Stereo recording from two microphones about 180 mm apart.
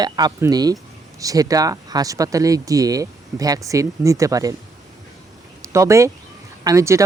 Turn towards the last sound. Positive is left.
turn(degrees=-15)  # may be behind; listen again after turning